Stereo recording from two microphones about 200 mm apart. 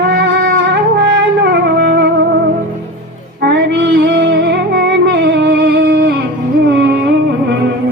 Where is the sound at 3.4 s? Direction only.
60° right (ahead or behind).